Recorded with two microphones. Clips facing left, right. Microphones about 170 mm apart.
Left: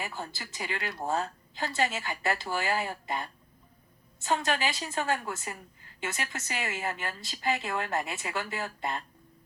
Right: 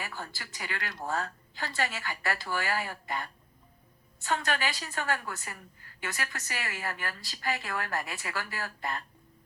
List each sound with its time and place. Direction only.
0.0 s a woman's voice: 20° left (ahead or behind)